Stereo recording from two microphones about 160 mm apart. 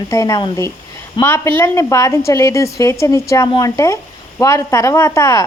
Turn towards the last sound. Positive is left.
turn(degrees=20)  # may be behind; listen again after turning